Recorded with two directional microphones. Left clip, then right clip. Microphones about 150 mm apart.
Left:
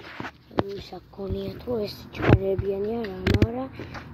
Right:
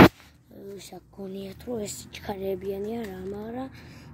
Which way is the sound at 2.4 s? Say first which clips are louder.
Left 5 dB; 25° right (ahead or behind).